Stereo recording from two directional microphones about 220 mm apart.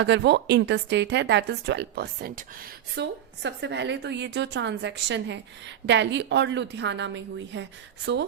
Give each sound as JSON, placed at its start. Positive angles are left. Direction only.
{"t": 0.1, "sound": "speech", "side_deg": -50}